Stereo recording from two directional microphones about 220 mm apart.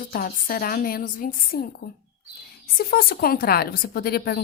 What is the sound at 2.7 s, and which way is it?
A woman's voice, 45° left (ahead or behind).